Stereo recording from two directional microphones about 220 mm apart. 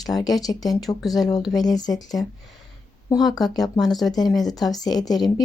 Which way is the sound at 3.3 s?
15° left (ahead or behind).